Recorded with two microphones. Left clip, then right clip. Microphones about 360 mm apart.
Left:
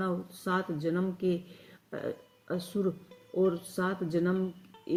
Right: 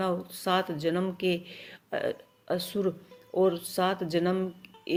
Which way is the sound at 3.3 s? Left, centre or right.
Right.